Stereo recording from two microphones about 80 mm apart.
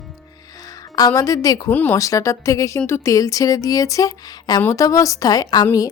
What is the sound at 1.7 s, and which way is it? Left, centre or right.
Speech, left.